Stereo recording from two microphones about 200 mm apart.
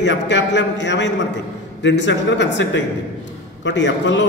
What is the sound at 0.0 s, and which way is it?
A man's voice, 60° left (ahead or behind).